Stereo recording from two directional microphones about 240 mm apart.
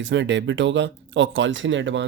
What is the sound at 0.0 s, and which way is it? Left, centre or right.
Speech, right.